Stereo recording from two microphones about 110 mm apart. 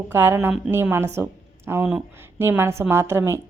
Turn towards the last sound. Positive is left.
turn(degrees=-20)  # may be behind; listen again after turning